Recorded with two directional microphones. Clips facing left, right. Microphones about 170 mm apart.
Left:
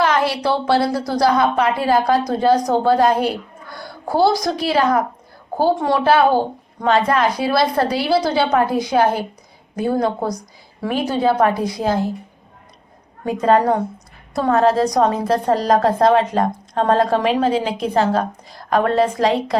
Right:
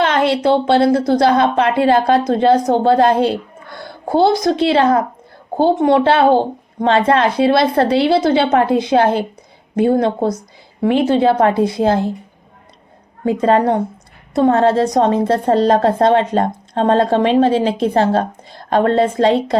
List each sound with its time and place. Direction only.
0.0 s a woman's voice: 25° right (ahead or behind)
13.2 s a woman's voice: 25° right (ahead or behind)